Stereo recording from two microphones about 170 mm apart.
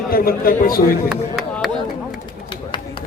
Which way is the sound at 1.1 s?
Centre (ahead or behind).